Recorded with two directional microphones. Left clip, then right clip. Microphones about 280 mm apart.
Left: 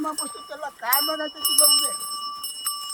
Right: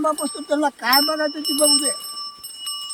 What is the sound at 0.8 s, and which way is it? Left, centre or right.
Speech, right.